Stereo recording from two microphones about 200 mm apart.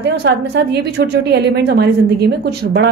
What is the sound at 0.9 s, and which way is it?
A woman's voice, 55° right (ahead or behind).